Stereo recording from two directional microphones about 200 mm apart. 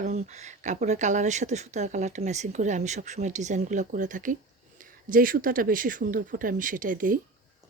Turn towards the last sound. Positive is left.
turn(degrees=-45)  # may be behind; listen again after turning